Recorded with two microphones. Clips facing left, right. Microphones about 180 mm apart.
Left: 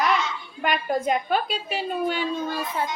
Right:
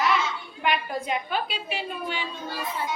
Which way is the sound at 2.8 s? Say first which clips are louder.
Left 3 dB; 55° left (ahead or behind).